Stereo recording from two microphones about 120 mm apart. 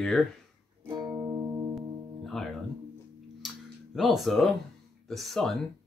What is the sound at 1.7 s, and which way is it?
Music, centre (ahead or behind).